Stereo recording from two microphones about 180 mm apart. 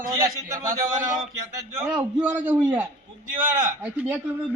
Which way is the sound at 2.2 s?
10° right (ahead or behind).